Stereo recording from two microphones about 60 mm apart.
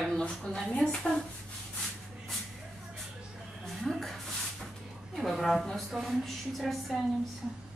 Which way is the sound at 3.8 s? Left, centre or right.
Centre.